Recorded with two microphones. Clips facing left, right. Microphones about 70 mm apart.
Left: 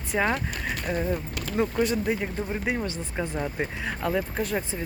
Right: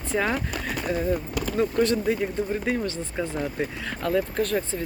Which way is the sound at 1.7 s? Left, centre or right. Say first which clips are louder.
Right 3 dB; centre.